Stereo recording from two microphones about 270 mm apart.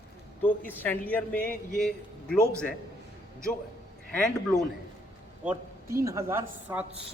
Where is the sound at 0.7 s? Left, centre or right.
Centre.